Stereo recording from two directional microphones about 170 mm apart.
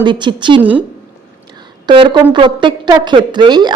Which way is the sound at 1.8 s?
30° right (ahead or behind).